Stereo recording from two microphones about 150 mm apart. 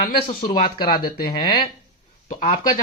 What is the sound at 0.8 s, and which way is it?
Speech, 90° left.